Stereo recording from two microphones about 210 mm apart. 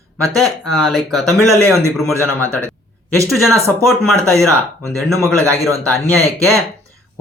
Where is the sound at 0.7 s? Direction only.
Centre (ahead or behind).